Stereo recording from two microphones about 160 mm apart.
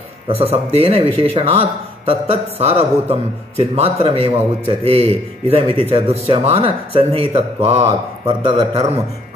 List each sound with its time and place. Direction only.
0.3 s a man's voice: 40° right (ahead or behind)